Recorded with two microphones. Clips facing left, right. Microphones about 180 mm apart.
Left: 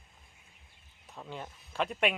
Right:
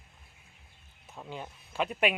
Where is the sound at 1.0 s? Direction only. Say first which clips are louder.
Right 1 dB; 5° right (ahead or behind).